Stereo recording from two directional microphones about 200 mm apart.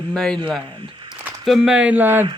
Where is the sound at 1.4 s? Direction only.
Centre (ahead or behind).